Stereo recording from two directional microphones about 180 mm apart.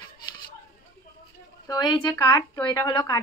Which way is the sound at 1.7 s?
25° left (ahead or behind).